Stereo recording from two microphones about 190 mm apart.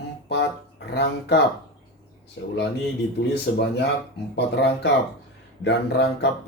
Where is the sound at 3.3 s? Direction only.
60° left (ahead or behind).